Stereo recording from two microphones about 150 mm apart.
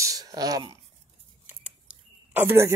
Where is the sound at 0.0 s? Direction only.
25° right (ahead or behind).